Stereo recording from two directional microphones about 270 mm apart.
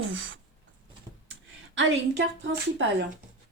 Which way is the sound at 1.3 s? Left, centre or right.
Right.